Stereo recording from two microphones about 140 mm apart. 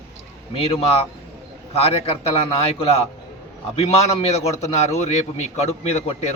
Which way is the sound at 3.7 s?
50° left (ahead or behind).